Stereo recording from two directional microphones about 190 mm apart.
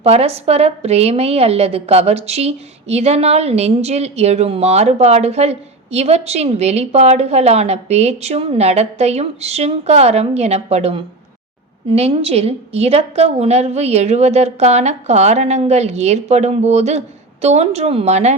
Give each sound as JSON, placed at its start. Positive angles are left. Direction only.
{"t": 0.0, "sound": "a woman's voice", "side_deg": -30}